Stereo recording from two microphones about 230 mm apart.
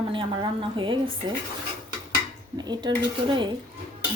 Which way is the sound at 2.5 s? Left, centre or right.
Centre.